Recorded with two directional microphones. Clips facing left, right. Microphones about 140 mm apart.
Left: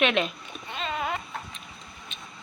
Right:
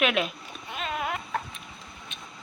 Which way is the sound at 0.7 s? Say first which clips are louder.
Left 1 dB; 5° right (ahead or behind).